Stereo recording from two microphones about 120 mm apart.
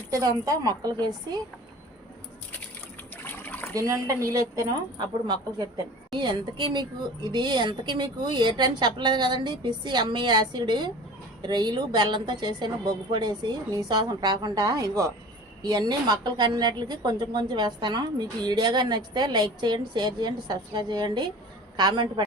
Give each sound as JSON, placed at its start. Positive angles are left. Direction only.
{"t": 0.1, "sound": "a woman's voice", "side_deg": -30}
{"t": 3.2, "sound": "water", "side_deg": 15}
{"t": 3.8, "sound": "speech", "side_deg": -25}
{"t": 4.9, "sound": "a woman's voice", "side_deg": -40}